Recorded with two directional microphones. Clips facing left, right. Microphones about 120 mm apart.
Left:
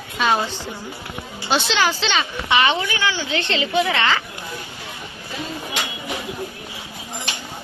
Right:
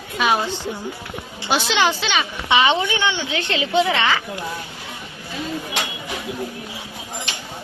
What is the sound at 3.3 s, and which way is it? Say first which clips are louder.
Speech: right 1 dB; 10° right (ahead or behind).